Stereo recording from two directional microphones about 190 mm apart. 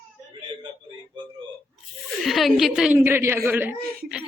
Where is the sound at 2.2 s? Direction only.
Centre (ahead or behind).